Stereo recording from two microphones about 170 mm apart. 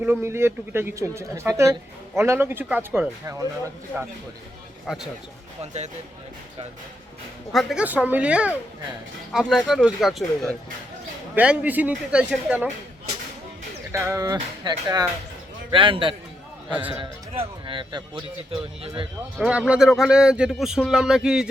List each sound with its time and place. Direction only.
0.0 s speech: 15° right (ahead or behind)
4.9 s a man's voice: centre (ahead or behind)
7.5 s a man's voice: centre (ahead or behind)
13.9 s a man's voice: 20° right (ahead or behind)
19.4 s a man's voice: 5° right (ahead or behind)